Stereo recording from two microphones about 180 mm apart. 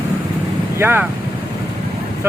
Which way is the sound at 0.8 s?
10° right (ahead or behind).